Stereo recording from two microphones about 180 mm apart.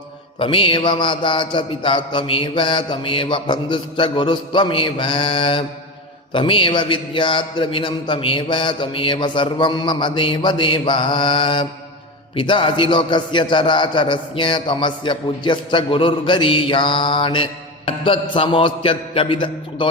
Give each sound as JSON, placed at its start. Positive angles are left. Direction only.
{"t": 0.3, "sound": "a man's voice", "side_deg": 30}